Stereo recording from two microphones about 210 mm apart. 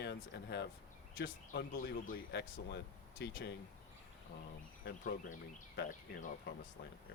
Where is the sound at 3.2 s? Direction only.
55° left (ahead or behind).